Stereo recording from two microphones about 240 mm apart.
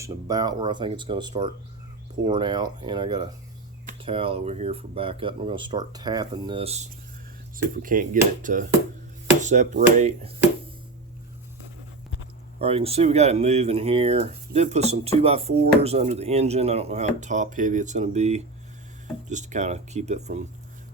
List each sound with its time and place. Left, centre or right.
0.0 s speech: centre
12.5 s speech: right